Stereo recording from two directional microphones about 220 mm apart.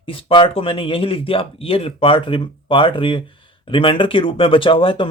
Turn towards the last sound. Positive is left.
turn(degrees=25)  # may be behind; listen again after turning